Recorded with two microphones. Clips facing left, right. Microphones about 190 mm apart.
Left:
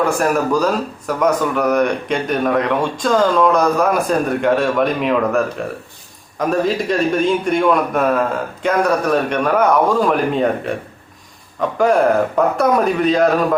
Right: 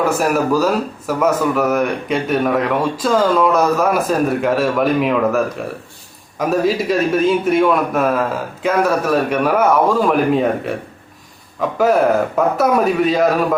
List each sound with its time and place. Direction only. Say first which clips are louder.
0.0 s a man's voice: even; 5° right (ahead or behind)
11.8 s a man's voice: even; 5° right (ahead or behind)